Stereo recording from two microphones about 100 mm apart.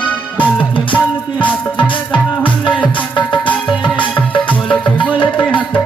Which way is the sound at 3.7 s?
55° left (ahead or behind).